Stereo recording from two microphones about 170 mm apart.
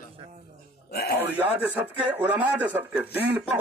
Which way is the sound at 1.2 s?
10° right (ahead or behind).